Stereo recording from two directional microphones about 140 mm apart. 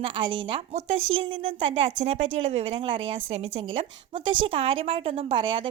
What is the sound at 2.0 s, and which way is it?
A woman's voice, 55° right (ahead or behind).